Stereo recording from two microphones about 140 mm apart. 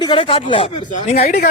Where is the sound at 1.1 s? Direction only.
60° left (ahead or behind).